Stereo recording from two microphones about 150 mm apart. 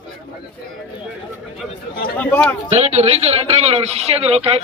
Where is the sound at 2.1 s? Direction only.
10° left (ahead or behind).